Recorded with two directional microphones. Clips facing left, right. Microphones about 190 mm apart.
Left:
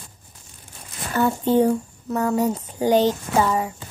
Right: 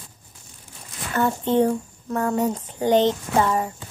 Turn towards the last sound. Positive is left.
turn(degrees=5)  # may be behind; listen again after turning